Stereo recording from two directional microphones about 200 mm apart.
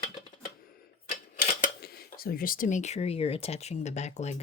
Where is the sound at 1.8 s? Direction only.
50° left (ahead or behind).